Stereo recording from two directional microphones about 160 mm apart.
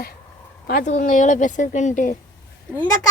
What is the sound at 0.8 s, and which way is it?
Speech, 50° left (ahead or behind).